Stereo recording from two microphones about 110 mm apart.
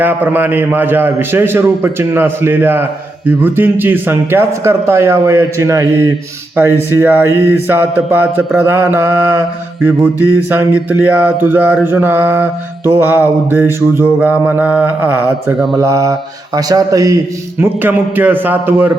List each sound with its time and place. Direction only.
0.0 s a man's voice: 15° right (ahead or behind)
10.2 s mantra: 20° right (ahead or behind)
11.4 s a man's voice: 15° right (ahead or behind)
13.0 s mantra: 20° right (ahead or behind)
15.8 s speech: 30° right (ahead or behind)
17.6 s mantra: 15° right (ahead or behind)